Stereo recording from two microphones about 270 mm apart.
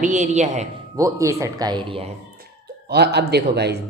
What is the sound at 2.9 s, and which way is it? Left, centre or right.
Speech, right.